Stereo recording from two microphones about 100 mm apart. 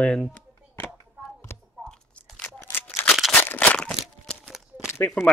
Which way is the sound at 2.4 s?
15° left (ahead or behind).